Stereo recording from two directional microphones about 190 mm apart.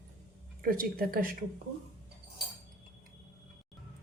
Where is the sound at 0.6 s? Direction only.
50° right (ahead or behind).